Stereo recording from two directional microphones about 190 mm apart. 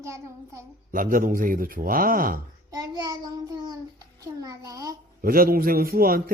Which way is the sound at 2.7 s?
20° right (ahead or behind).